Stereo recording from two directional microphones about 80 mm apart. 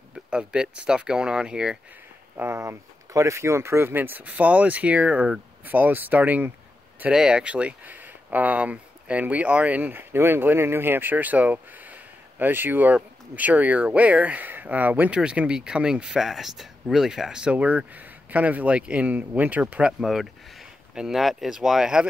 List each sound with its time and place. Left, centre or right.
0.3 s speech: centre
2.3 s speech: right; by 22.0 s centre